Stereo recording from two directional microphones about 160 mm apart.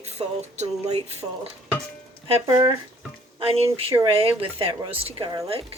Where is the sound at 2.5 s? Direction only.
25° right (ahead or behind).